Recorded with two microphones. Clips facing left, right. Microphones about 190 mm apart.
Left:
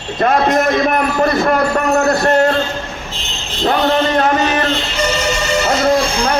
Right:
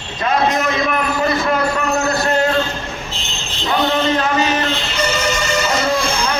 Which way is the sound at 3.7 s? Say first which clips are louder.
Left 3 dB; 55° left (ahead or behind).